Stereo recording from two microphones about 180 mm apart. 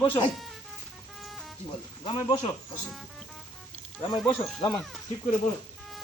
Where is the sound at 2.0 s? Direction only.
30° left (ahead or behind).